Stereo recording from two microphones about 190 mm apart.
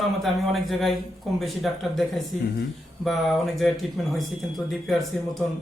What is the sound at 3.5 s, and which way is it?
A man's voice, centre (ahead or behind).